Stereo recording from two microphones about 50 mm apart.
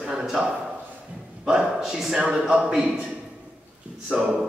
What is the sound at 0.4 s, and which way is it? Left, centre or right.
Speech, centre.